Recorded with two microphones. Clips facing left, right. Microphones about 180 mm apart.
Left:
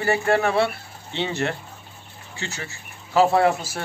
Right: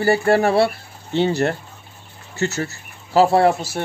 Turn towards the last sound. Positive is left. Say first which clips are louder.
# right 3 dB
turn(degrees=-30)  # may be behind; listen again after turning